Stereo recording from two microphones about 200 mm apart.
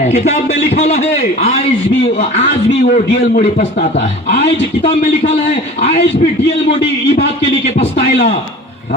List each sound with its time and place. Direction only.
0.0 s a man's voice: 35° left (ahead or behind)
4.4 s a man's voice: 30° left (ahead or behind)